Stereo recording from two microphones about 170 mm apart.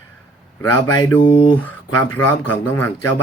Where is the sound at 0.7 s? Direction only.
20° left (ahead or behind).